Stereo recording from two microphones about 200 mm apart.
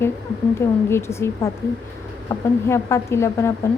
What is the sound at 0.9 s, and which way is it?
A woman's voice, 15° left (ahead or behind).